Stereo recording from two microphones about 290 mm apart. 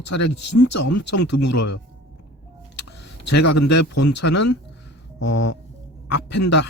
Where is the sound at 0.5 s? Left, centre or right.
Left.